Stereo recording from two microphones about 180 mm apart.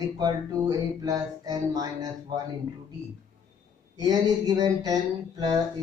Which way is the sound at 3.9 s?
20° right (ahead or behind).